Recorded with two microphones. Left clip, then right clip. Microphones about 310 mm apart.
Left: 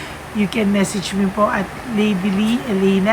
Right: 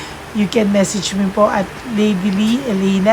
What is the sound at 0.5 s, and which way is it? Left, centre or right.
Speech, centre.